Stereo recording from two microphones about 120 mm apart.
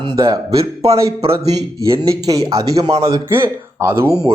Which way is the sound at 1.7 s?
25° right (ahead or behind).